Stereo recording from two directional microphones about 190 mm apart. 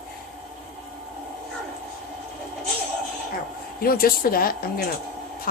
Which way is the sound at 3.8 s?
50° left (ahead or behind).